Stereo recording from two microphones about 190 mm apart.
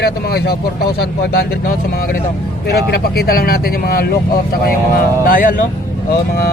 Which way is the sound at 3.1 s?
55° left (ahead or behind).